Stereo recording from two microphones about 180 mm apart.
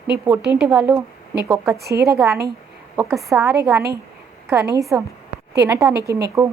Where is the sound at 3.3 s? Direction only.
5° right (ahead or behind).